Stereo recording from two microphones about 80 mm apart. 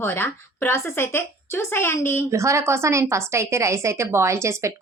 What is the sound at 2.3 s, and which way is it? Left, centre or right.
A woman's voice, right.